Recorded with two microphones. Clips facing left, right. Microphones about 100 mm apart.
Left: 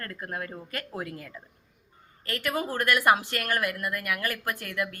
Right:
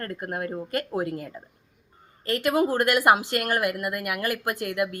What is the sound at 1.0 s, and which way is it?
Speech, 45° right (ahead or behind).